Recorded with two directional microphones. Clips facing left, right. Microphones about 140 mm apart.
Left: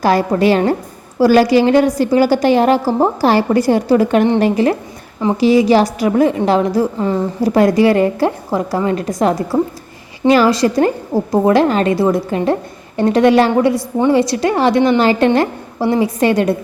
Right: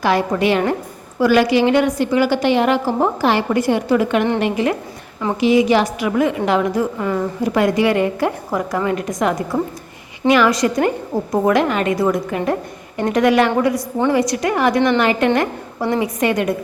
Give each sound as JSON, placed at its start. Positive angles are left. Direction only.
{"t": 0.0, "sound": "a woman's voice", "side_deg": 40}